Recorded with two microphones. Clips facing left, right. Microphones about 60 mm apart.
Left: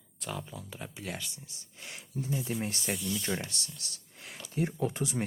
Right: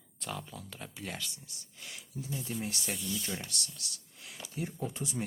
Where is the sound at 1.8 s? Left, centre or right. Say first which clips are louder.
Left 5 dB; left.